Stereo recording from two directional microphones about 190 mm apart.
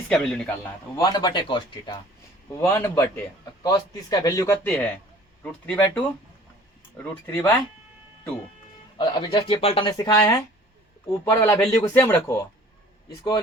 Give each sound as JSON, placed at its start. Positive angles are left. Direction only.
{"t": 0.1, "sound": "a man's voice", "side_deg": 5}
{"t": 0.9, "sound": "speech", "side_deg": 20}
{"t": 7.3, "sound": "speech", "side_deg": 10}
{"t": 9.0, "sound": "speech", "side_deg": 20}